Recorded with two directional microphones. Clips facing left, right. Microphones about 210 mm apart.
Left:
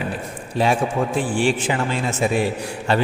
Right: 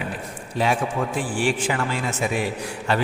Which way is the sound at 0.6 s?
30° left (ahead or behind).